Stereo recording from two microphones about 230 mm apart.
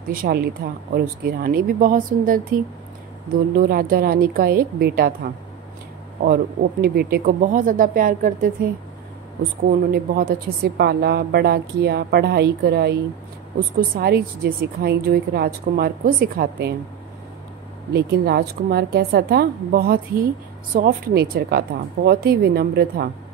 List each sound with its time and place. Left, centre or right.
0.1 s speech: right
9.7 s a woman's voice: right
17.9 s a woman's voice: right